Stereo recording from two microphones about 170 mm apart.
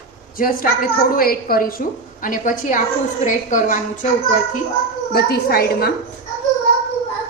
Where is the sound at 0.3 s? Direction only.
55° left (ahead or behind).